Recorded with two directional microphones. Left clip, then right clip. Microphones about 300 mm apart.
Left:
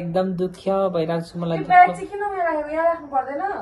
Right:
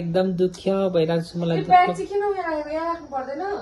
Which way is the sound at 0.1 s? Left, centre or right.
Centre.